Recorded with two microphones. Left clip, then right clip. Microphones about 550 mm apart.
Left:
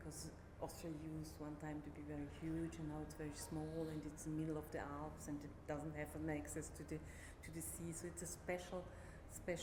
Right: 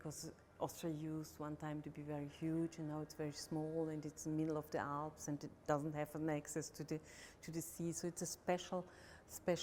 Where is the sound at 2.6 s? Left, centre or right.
Right.